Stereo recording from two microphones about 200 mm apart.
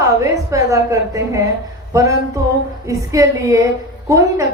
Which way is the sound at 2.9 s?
15° right (ahead or behind).